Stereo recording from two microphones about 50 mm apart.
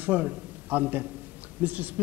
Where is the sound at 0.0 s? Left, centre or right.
Right.